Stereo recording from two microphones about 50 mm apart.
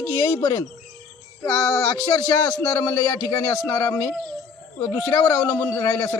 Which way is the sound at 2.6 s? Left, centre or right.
Left.